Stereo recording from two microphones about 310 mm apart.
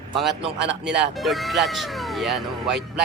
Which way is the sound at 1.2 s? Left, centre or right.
Centre.